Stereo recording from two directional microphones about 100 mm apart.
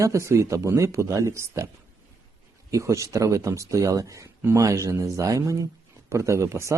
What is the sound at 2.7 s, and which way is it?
Speech, 30° right (ahead or behind).